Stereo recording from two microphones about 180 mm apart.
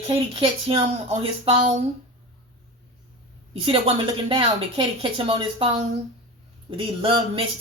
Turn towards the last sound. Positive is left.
turn(degrees=-30)  # may be behind; listen again after turning